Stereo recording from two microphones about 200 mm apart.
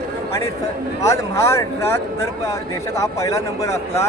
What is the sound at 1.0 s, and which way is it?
Speech, 15° left (ahead or behind).